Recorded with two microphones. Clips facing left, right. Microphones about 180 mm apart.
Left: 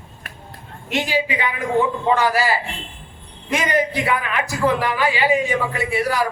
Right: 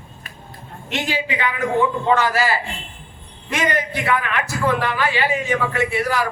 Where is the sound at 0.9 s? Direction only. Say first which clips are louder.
Left 3 dB; 15° left (ahead or behind).